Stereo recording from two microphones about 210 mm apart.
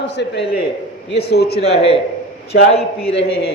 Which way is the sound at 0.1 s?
55° left (ahead or behind).